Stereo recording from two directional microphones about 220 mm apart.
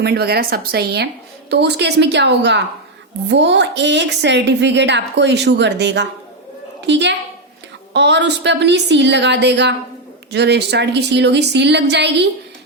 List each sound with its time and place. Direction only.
0.0 s a woman's voice: 45° right (ahead or behind)